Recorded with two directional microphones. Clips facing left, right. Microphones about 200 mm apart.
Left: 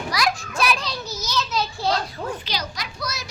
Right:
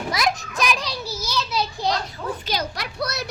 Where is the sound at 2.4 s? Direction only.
55° right (ahead or behind).